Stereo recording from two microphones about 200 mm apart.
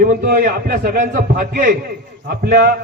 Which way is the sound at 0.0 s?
45° right (ahead or behind).